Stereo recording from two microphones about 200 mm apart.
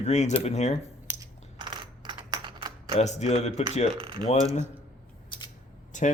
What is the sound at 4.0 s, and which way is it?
Speech, 25° right (ahead or behind).